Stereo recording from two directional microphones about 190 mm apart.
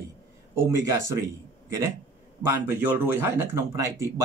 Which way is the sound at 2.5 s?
10° right (ahead or behind).